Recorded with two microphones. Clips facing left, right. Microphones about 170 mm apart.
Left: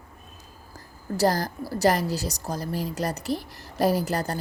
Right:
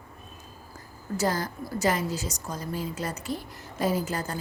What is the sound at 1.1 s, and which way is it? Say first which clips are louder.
Speech: left 4 dB; 35° left (ahead or behind).